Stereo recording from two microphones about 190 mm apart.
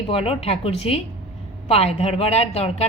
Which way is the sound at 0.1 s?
30° left (ahead or behind).